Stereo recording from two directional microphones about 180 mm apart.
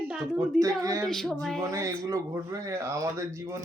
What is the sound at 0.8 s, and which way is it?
Speech, 20° right (ahead or behind).